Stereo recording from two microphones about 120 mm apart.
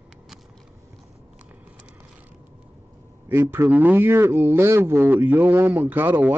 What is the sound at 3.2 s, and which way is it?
Speech, 20° right (ahead or behind).